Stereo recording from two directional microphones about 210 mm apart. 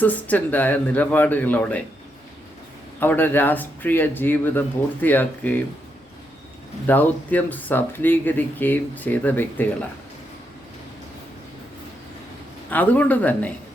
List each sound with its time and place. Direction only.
0.0 s speech: 5° left (ahead or behind)
3.0 s speech: 10° left (ahead or behind)
6.8 s speech: 10° left (ahead or behind)
12.7 s speech: 5° left (ahead or behind)